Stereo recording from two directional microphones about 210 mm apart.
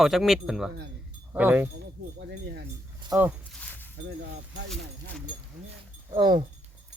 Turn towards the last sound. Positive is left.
turn(degrees=-20)  # may be behind; listen again after turning